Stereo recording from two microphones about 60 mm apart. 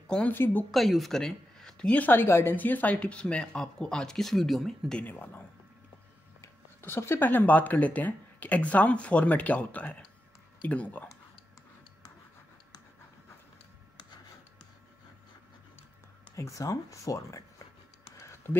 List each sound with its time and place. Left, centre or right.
0.3 s speech: left
0.7 s speech: centre
1.9 s speech: left
2.5 s speech: left; by 4.9 s centre
5.0 s speech: left
6.8 s speech: left
7.2 s speech: left
16.3 s speech: left
18.1 s a sound: left